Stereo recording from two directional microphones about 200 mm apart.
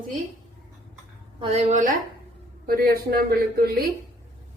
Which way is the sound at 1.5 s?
35° right (ahead or behind).